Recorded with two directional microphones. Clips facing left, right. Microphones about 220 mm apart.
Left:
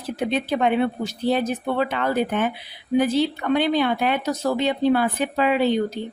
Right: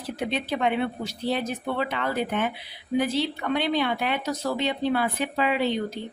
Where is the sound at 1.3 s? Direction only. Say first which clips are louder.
Left 5 dB; 45° left (ahead or behind).